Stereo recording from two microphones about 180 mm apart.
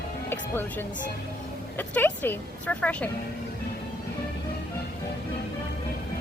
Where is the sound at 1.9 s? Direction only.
10° left (ahead or behind).